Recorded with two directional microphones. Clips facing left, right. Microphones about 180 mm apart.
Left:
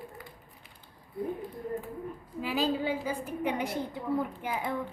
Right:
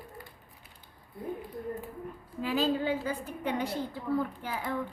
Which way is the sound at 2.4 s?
10° left (ahead or behind).